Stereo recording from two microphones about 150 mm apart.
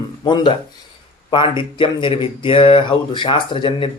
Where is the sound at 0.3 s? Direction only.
30° left (ahead or behind).